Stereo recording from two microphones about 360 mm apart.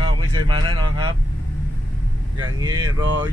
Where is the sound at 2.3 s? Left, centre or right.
Centre.